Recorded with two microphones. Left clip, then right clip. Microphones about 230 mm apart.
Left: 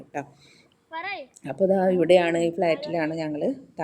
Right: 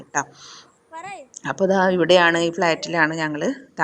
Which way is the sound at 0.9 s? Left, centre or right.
Centre.